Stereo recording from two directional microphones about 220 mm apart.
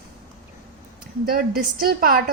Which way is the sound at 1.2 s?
40° right (ahead or behind).